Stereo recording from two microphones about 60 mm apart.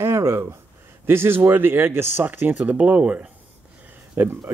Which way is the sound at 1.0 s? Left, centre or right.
Right.